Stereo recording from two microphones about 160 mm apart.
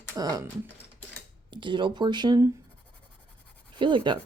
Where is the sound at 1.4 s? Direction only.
30° right (ahead or behind).